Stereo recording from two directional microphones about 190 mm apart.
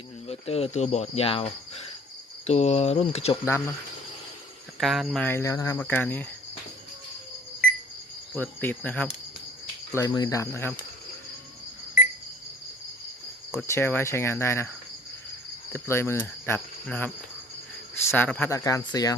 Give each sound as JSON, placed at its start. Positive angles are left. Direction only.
{"t": 0.3, "sound": "cricket", "side_deg": 30}
{"t": 3.4, "sound": "speech", "side_deg": 15}
{"t": 4.8, "sound": "speech", "side_deg": 0}
{"t": 8.4, "sound": "speech", "side_deg": 10}
{"t": 13.7, "sound": "speech", "side_deg": 15}
{"t": 15.7, "sound": "cricket", "side_deg": 15}
{"t": 17.9, "sound": "speech", "side_deg": 10}